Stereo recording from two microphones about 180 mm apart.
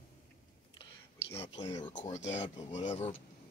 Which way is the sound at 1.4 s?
35° left (ahead or behind).